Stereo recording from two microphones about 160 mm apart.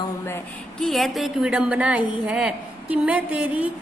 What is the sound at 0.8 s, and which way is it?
A woman's voice, centre (ahead or behind).